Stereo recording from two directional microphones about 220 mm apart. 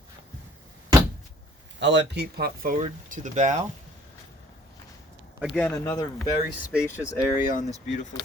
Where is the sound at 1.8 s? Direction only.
55° right (ahead or behind); by 3.5 s 35° right (ahead or behind).